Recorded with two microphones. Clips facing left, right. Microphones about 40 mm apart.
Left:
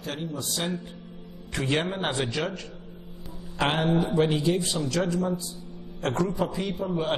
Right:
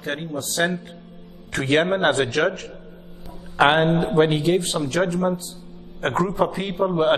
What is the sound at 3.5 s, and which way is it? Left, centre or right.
A man's voice, right.